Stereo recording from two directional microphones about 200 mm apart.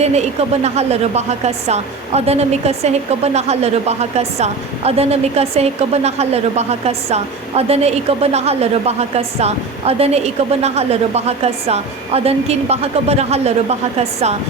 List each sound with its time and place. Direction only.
0.0 s a woman's voice: 35° right (ahead or behind)